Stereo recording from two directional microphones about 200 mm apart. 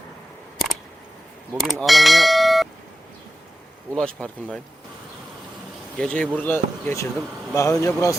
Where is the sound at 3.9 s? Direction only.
5° left (ahead or behind).